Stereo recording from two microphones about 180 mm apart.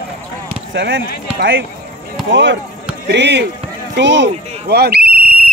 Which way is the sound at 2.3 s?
90° right.